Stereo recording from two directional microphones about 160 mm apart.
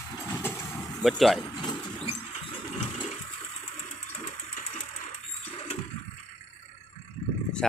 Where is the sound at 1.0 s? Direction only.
Centre (ahead or behind).